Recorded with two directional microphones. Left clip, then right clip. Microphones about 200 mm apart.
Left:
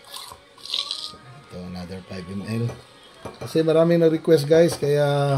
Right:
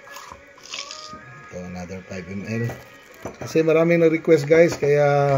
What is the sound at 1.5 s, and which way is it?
Speech, 25° left (ahead or behind).